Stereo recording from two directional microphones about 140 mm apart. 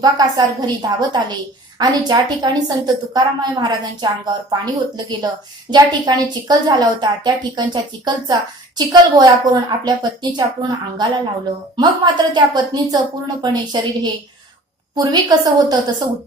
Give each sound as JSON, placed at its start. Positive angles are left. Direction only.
{"t": 0.0, "sound": "a woman's voice", "side_deg": -30}